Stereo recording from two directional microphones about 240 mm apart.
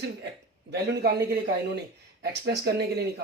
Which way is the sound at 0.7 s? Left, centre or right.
Right.